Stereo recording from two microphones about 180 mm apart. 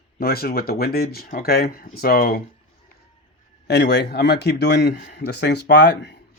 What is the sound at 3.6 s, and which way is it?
Speech, 65° left (ahead or behind).